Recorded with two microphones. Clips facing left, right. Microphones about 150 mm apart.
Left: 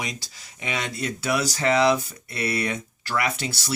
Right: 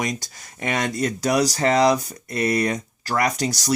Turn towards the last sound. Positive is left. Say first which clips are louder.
# right 5 dB
turn(degrees=-40)  # may be behind; listen again after turning